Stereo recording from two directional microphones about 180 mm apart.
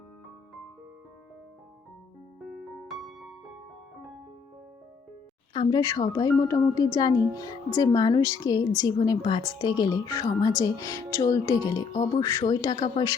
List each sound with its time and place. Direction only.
2.4 s music: centre (ahead or behind)
5.5 s speech: 20° left (ahead or behind)